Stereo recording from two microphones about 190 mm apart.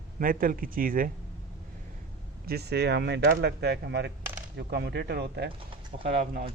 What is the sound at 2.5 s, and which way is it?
Speech, 60° right (ahead or behind).